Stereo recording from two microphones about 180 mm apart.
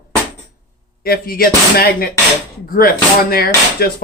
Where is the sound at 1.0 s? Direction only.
55° left (ahead or behind).